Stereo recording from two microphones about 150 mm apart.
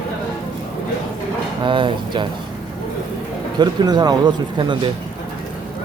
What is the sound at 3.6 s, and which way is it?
A man's voice, 25° right (ahead or behind).